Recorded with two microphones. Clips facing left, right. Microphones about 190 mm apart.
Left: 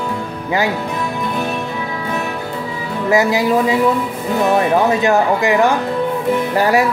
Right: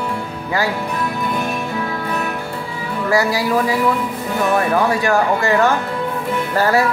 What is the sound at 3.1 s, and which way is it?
Speech, 20° left (ahead or behind).